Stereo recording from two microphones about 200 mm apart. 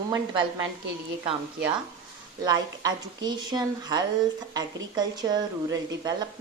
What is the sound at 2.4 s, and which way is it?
A woman's voice, 20° right (ahead or behind).